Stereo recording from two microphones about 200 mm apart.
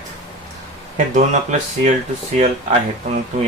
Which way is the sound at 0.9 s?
40° right (ahead or behind).